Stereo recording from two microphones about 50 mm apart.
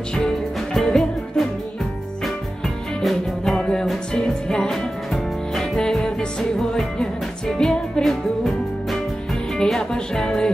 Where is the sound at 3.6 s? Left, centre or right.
Centre.